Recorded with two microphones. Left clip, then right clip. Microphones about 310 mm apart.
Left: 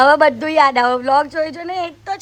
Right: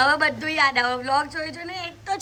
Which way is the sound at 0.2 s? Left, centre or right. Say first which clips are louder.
Left 8 dB; centre.